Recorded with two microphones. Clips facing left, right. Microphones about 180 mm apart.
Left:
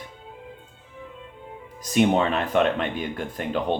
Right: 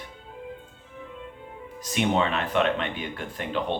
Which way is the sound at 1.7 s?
45° left (ahead or behind).